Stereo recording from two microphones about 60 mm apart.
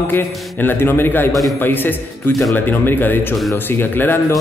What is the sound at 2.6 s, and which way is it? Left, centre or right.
A man's voice, left.